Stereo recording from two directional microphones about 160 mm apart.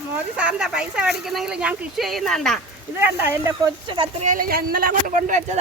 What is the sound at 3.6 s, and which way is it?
Speech, 30° right (ahead or behind).